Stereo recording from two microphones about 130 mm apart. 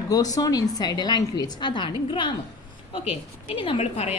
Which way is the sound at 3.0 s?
50° left (ahead or behind).